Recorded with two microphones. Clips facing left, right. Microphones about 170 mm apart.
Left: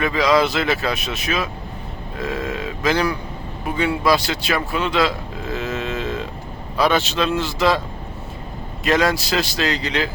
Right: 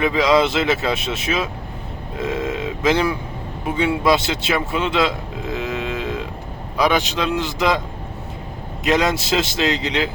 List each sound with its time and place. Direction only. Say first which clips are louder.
0.3 s a man's voice: even; 25° right (ahead or behind)
8.8 s a man's voice: even; 20° right (ahead or behind)